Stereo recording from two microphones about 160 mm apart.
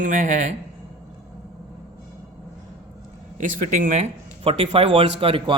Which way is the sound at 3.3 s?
55° right (ahead or behind).